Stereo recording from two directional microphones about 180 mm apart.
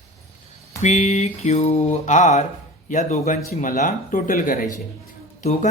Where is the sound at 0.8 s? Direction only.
40° left (ahead or behind).